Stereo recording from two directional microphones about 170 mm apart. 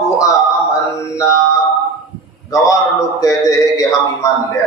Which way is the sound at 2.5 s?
20° left (ahead or behind).